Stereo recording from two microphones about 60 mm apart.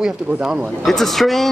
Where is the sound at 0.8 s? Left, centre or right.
Centre.